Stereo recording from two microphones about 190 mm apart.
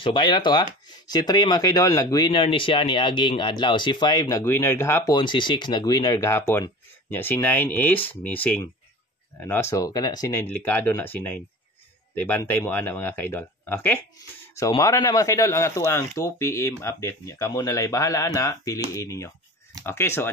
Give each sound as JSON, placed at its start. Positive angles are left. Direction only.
{"t": 0.0, "sound": "speech", "side_deg": 25}